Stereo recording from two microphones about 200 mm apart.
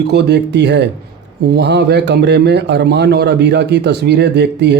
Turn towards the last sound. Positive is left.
turn(degrees=-60)  # may be behind; listen again after turning